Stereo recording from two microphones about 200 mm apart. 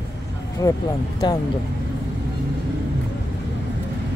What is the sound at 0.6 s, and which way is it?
Speech, 20° left (ahead or behind).